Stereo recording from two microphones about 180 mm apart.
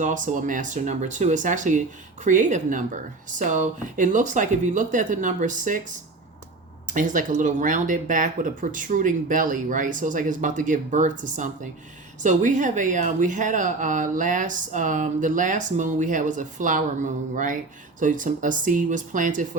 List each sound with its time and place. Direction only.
0.0 s speech: 45° right (ahead or behind)
6.8 s speech: 45° right (ahead or behind)